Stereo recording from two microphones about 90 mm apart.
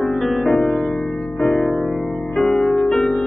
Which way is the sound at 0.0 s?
Centre (ahead or behind).